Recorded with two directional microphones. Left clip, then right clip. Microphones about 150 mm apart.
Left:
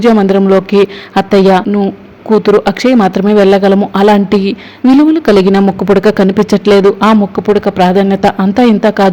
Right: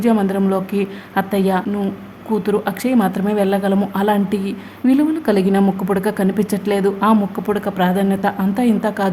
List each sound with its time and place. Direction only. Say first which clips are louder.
0.0 s speech: left 10 dB; 30° left (ahead or behind)